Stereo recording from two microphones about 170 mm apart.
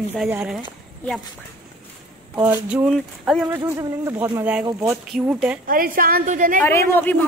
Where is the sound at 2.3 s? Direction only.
10° right (ahead or behind).